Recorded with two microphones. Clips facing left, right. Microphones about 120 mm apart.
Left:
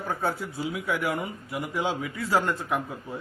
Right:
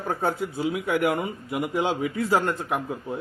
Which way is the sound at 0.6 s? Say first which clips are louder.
Right 5 dB; 55° right (ahead or behind).